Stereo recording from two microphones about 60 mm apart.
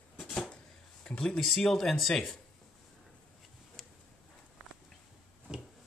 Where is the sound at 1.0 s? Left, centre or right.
Centre.